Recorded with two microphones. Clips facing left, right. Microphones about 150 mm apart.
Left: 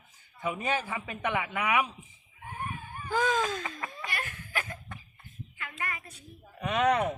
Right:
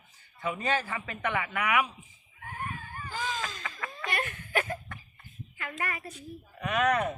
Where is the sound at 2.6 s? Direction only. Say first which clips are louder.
Even; 15° left (ahead or behind).